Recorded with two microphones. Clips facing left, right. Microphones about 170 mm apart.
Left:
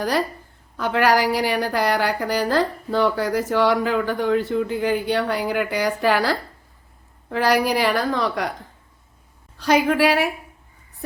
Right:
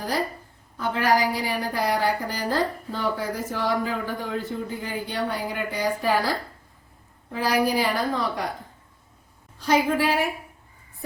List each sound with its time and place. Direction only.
0.0 s a woman's voice: 75° left (ahead or behind)
9.6 s a woman's voice: 75° left (ahead or behind)